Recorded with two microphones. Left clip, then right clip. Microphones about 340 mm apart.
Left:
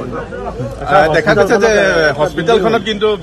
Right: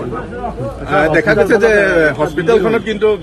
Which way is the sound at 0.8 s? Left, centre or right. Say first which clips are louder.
Left 2 dB; left.